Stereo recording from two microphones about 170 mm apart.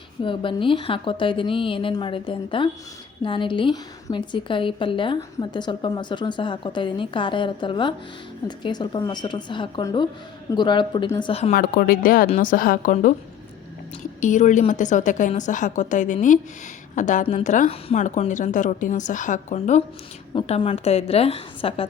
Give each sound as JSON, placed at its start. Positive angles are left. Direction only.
{"t": 0.2, "sound": "a woman's voice", "side_deg": 30}
{"t": 11.5, "sound": "a woman's voice", "side_deg": 60}
{"t": 20.3, "sound": "a woman's voice", "side_deg": 30}